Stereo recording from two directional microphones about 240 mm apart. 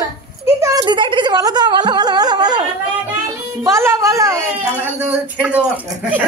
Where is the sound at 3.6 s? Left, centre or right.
Centre.